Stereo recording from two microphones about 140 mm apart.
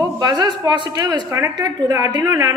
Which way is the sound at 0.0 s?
30° right (ahead or behind).